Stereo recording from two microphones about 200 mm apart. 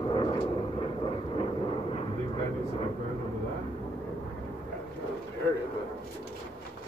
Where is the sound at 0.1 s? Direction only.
25° left (ahead or behind).